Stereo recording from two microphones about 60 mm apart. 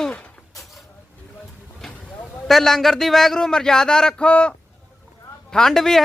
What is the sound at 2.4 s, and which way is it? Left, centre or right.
A man's voice, centre.